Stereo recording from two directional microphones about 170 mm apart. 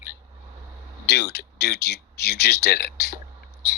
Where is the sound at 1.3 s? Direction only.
70° left (ahead or behind).